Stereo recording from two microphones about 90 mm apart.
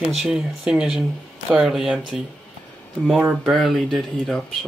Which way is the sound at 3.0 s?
10° right (ahead or behind).